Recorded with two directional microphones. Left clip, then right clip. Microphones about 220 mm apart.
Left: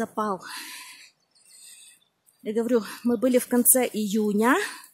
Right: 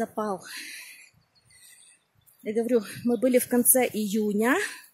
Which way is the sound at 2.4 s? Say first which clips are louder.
Left 1 dB; 10° left (ahead or behind).